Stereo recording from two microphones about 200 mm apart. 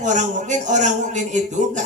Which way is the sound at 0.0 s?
40° right (ahead or behind).